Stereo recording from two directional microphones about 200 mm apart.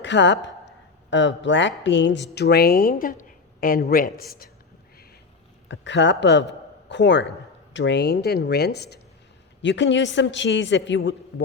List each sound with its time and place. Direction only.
0.0 s a woman's voice: 65° left (ahead or behind); by 4.4 s 45° left (ahead or behind)
5.6 s a man's voice: 65° left (ahead or behind)